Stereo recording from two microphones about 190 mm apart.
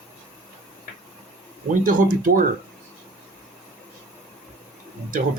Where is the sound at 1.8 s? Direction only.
45° right (ahead or behind).